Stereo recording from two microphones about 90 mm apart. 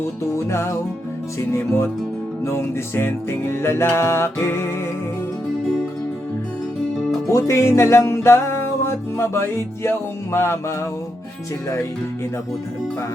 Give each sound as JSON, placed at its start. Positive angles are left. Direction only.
{"t": 0.3, "sound": "music", "side_deg": 30}
{"t": 7.3, "sound": "music", "side_deg": 35}